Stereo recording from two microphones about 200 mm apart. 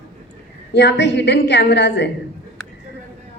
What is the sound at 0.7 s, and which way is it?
A woman's voice, 60° left (ahead or behind).